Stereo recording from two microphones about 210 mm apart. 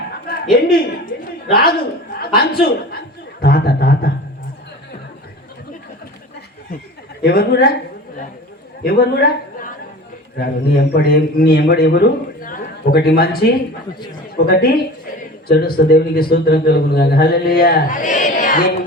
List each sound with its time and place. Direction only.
0.3 s a man's voice: 45° left (ahead or behind)
1.2 s a sound: 45° left (ahead or behind)
2.1 s a man's voice: 45° left (ahead or behind)
7.2 s a man's voice: 45° left (ahead or behind)
8.8 s a man's voice: 45° left (ahead or behind)
10.3 s a man's voice: 50° left (ahead or behind)